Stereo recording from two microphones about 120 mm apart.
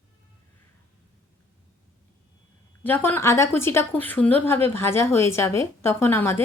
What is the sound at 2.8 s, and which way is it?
Speech, 15° left (ahead or behind).